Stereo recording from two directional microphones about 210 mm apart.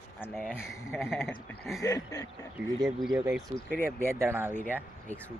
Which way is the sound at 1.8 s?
15° left (ahead or behind).